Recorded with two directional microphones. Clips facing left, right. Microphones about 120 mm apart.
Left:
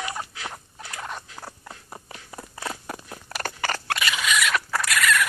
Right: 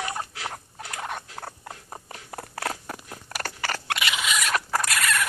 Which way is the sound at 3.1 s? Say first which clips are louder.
Left 2 dB; centre (ahead or behind).